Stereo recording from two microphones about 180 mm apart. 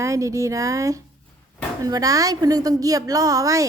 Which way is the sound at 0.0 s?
15° right (ahead or behind).